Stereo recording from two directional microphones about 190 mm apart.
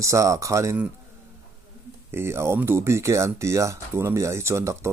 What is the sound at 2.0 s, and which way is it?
Speech, 15° right (ahead or behind).